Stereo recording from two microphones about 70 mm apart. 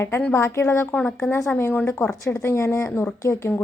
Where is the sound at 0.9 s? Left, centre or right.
Left.